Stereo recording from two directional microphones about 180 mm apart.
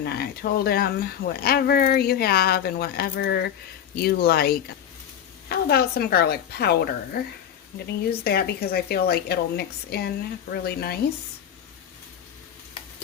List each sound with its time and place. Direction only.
0.0 s speech: 60° left (ahead or behind)